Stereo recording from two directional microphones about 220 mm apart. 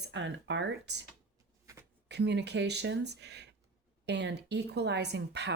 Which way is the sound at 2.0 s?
50° right (ahead or behind).